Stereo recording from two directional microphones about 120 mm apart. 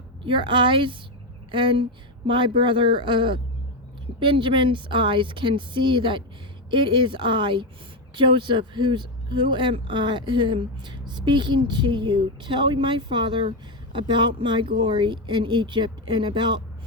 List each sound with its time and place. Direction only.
0.3 s a woman's voice: 40° right (ahead or behind)